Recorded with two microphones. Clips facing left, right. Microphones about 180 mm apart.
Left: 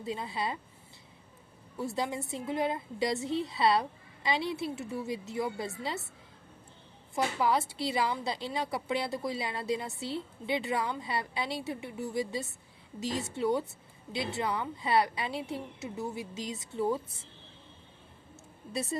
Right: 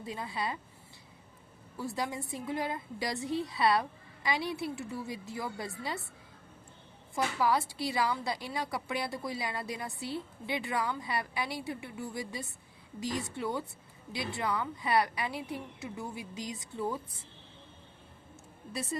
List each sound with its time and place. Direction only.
0.0 s a woman's voice: 25° left (ahead or behind)
1.8 s a woman's voice: 25° left (ahead or behind)
7.2 s a woman's voice: 20° left (ahead or behind)